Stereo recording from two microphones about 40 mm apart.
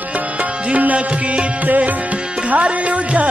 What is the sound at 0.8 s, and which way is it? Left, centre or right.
Music, right.